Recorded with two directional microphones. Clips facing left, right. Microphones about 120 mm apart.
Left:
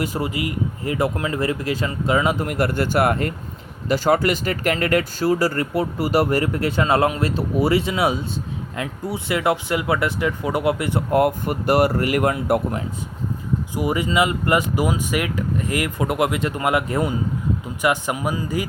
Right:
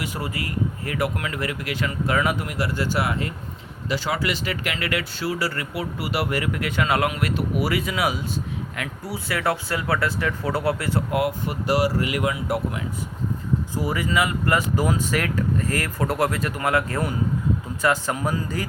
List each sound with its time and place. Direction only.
0.2 s speech: 20° left (ahead or behind)
2.4 s speech: 50° left (ahead or behind); by 11.0 s 20° left (ahead or behind)
11.1 s speech: 50° left (ahead or behind)
13.7 s speech: 20° left (ahead or behind)